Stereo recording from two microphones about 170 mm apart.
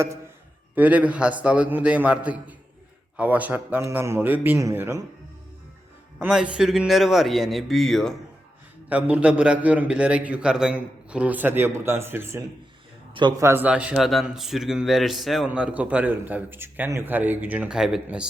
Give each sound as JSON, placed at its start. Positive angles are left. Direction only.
{"t": 0.8, "sound": "a man's voice", "side_deg": -10}
{"t": 6.1, "sound": "a man's voice", "side_deg": -5}
{"t": 13.1, "sound": "a man's voice", "side_deg": -25}
{"t": 13.5, "sound": "a man's voice", "side_deg": -10}